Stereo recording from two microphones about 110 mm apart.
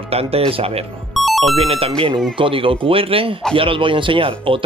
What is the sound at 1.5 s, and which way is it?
Speech, 60° right (ahead or behind).